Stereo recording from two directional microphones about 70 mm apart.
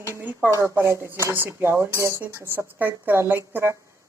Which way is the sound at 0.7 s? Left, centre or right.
Right.